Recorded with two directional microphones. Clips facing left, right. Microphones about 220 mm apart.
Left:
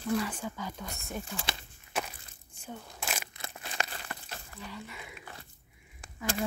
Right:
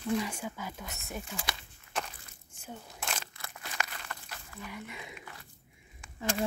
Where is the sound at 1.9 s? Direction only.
5° left (ahead or behind).